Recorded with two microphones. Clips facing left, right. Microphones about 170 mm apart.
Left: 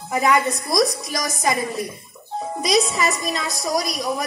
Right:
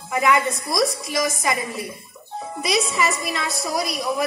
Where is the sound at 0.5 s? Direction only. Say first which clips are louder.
Left 2 dB; 25° right (ahead or behind).